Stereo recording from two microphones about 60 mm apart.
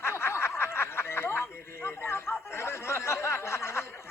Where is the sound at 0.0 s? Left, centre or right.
Left.